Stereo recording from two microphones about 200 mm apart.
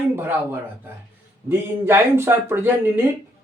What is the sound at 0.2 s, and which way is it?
Speech, 10° right (ahead or behind).